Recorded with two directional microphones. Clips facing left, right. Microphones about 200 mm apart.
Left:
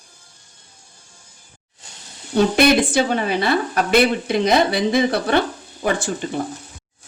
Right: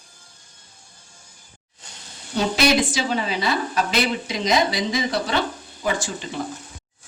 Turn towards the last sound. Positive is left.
turn(degrees=55)  # may be behind; listen again after turning